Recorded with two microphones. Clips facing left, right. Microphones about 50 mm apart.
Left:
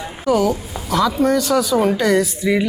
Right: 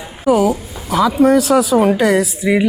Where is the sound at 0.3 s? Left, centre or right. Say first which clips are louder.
Right 3 dB; centre.